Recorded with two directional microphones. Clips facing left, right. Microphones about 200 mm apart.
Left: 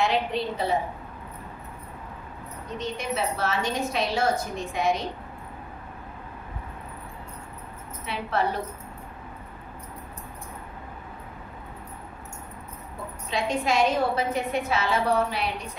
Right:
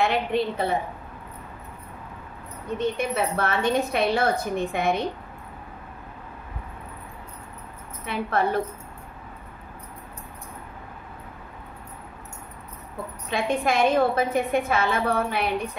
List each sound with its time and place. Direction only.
0.0 s a woman's voice: 55° right (ahead or behind)
2.8 s a woman's voice: 55° right (ahead or behind)
8.0 s a woman's voice: 50° right (ahead or behind)
13.3 s a woman's voice: 55° right (ahead or behind)